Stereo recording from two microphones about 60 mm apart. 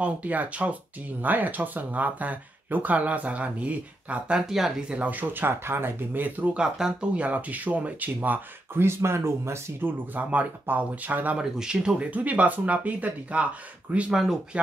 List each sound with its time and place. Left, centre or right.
0.0 s speech: right
4.5 s speech: centre
4.9 s speech: right
6.5 s speech: centre
8.7 s speech: right
10.3 s speech: right
11.3 s speech: centre
14.1 s speech: centre